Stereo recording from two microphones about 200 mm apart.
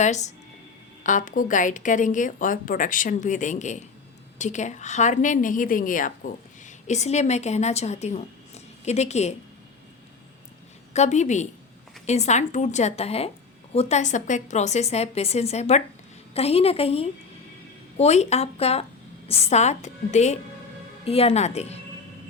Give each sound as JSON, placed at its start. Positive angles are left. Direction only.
{"t": 0.0, "sound": "a woman's voice", "side_deg": 35}
{"t": 10.9, "sound": "a woman's voice", "side_deg": 35}